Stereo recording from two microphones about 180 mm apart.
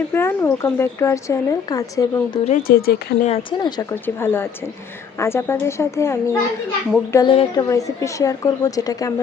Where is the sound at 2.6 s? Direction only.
55° left (ahead or behind).